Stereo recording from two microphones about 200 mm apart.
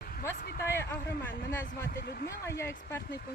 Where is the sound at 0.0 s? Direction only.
45° left (ahead or behind).